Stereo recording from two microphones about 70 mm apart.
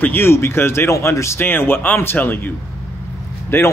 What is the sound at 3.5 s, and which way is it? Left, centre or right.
Speech, left.